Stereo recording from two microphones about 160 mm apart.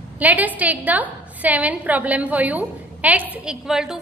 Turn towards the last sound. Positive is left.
turn(degrees=-5)  # may be behind; listen again after turning